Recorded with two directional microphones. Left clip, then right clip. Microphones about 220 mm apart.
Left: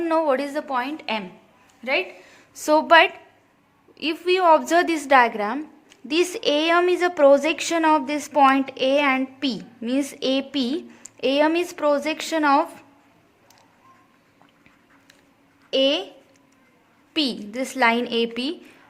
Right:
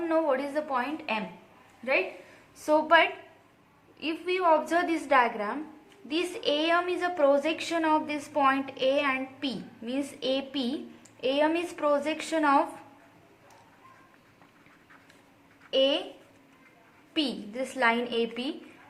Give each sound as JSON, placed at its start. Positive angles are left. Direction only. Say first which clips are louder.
{"t": 0.0, "sound": "a woman's voice", "louder": "left 6 dB", "side_deg": 45}
{"t": 15.7, "sound": "a woman's voice", "louder": "left 5 dB", "side_deg": 45}
{"t": 17.2, "sound": "a woman's voice", "louder": "left 6 dB", "side_deg": 45}